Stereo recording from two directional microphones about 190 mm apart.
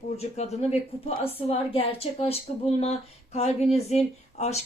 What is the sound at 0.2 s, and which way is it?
Speech, 35° left (ahead or behind).